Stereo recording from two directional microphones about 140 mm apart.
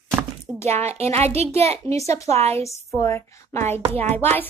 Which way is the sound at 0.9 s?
50° right (ahead or behind).